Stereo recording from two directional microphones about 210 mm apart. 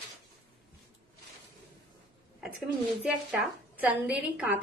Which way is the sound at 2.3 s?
5° right (ahead or behind).